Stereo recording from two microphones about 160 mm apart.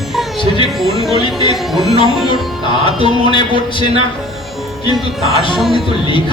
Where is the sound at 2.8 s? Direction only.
30° left (ahead or behind).